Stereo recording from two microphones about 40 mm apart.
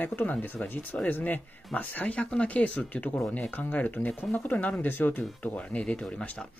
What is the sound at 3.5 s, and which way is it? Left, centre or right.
Speech, left.